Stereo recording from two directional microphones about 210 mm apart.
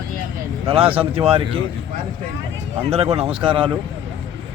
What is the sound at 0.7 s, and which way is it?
Speech, 25° right (ahead or behind).